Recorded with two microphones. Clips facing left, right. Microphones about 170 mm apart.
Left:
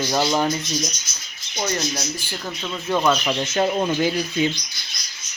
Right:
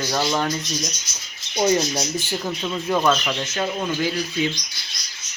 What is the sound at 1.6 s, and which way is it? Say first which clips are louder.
Speech: right 6 dB; 20° right (ahead or behind).